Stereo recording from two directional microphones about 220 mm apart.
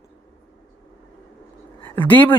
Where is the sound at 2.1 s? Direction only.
10° left (ahead or behind).